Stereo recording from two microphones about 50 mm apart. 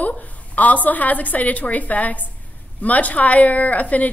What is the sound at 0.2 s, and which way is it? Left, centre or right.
A woman's voice, left.